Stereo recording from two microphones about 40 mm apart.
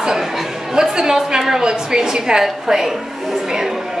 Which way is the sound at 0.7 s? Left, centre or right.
Centre.